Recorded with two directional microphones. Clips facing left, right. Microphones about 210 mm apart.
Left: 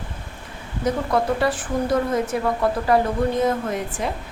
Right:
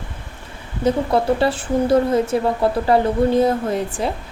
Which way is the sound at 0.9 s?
30° right (ahead or behind).